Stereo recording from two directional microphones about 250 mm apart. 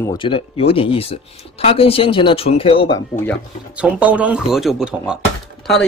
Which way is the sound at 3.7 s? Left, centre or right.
Centre.